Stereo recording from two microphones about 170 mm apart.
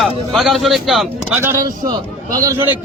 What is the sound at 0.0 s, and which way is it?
A man's voice, centre (ahead or behind).